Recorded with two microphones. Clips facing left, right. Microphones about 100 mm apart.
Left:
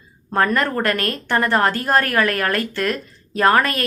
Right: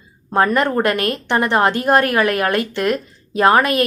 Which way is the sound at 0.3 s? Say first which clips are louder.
Right 3 dB; 15° right (ahead or behind).